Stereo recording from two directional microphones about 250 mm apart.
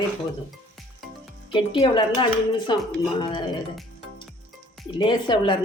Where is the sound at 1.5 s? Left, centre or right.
Centre.